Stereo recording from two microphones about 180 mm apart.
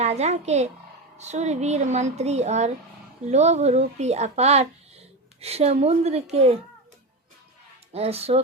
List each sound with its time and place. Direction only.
0.0 s speech: 40° right (ahead or behind)
7.9 s speech: 35° right (ahead or behind)